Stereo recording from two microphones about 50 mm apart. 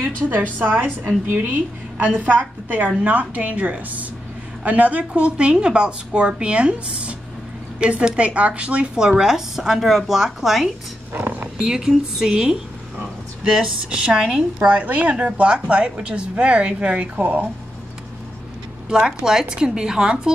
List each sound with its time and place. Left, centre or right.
0.3 s a woman's voice: right
2.0 s a woman's voice: right
8.9 s speech: centre
11.1 s a woman's voice: right
11.6 s a woman's voice: centre
14.7 s a woman's voice: right
18.9 s speech: centre